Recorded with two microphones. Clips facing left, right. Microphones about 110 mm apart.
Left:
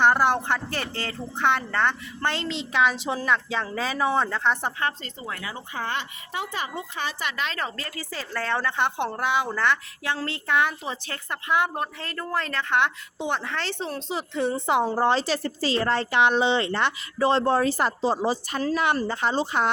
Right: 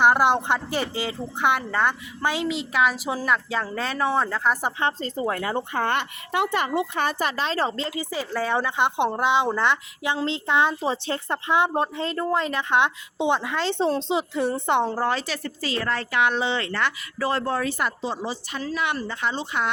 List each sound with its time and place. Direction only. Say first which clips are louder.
0.0 s speech: right 2 dB; 15° right (ahead or behind)
4.9 s speech: right 9 dB; 40° right (ahead or behind); by 13.7 s 15° right (ahead or behind)
13.7 s speech: right 8 dB; 25° right (ahead or behind)
14.3 s a woman's voice: left 2 dB; centre (ahead or behind)
14.9 s a woman's voice: left 3 dB; 25° left (ahead or behind)